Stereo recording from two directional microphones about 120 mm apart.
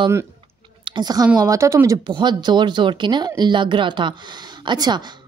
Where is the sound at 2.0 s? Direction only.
40° right (ahead or behind).